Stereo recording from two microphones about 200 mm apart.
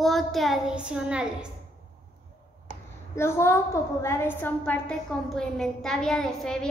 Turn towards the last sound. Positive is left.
turn(degrees=5)  # may be behind; listen again after turning